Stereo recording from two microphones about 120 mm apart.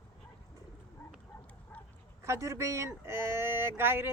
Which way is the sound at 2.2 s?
25° right (ahead or behind).